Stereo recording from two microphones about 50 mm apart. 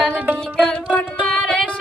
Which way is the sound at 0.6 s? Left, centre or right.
Left.